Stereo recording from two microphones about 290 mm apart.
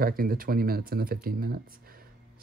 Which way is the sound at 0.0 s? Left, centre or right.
Right.